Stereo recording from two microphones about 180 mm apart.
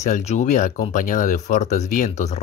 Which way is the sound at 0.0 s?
40° left (ahead or behind).